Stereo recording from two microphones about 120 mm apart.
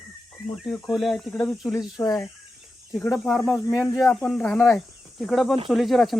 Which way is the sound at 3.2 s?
Centre (ahead or behind).